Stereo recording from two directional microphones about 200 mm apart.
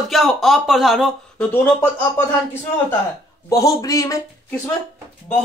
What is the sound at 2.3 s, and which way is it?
Speech, 10° left (ahead or behind).